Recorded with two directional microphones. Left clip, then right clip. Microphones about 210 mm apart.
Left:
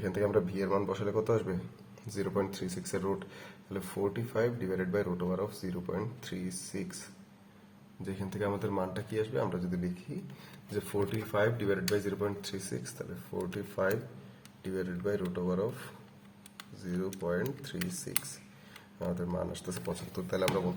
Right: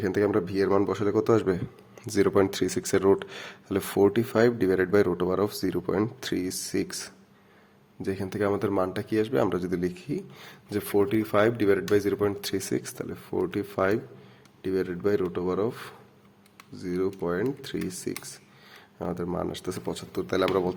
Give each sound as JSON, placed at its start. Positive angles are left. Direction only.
{"t": 0.0, "sound": "speech", "side_deg": -45}
{"t": 8.0, "sound": "speech", "side_deg": -40}